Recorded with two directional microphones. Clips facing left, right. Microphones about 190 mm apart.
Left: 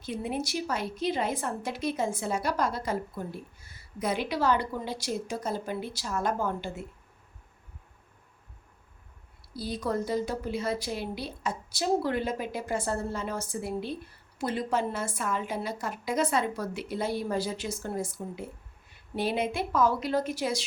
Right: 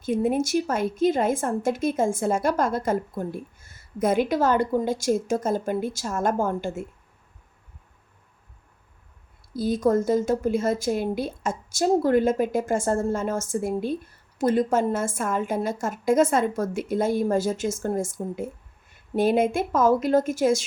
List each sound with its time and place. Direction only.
0.0 s a woman's voice: 50° right (ahead or behind)
9.5 s a woman's voice: 45° right (ahead or behind)